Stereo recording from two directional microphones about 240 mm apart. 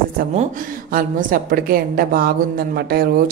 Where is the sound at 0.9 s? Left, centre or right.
Right.